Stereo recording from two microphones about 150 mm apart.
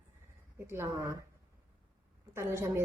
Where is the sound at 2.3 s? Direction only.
15° right (ahead or behind).